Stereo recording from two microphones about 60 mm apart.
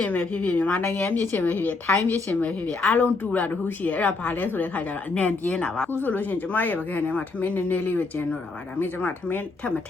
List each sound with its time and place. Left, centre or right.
0.0 s a woman's voice: left
0.8 s a woman's voice: left
5.1 s a woman's voice: left
5.9 s a woman's voice: left